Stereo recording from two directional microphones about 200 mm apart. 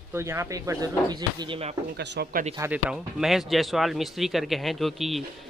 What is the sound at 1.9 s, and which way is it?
Speech, 55° right (ahead or behind).